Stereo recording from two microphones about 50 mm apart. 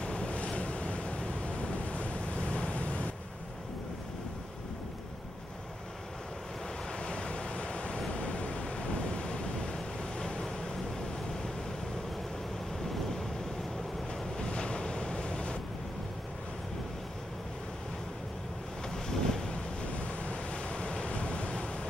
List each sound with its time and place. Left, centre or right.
0.0 s waves: centre
7.0 s waves: left
14.3 s waves: centre
19.0 s wind noise: centre
20.0 s waves: left